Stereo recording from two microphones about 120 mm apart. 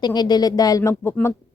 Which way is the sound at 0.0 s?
35° left (ahead or behind).